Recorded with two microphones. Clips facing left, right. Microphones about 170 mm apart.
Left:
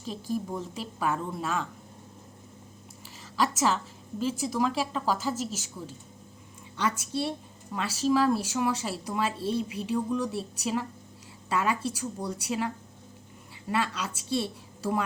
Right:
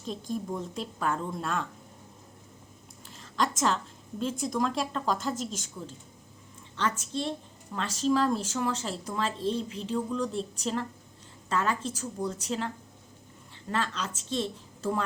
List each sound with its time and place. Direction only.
0.0 s speech: 5° left (ahead or behind)
3.2 s a sound: 5° left (ahead or behind)
4.2 s a woman's voice: 5° left (ahead or behind)